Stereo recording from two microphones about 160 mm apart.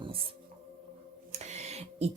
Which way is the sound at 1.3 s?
45° right (ahead or behind).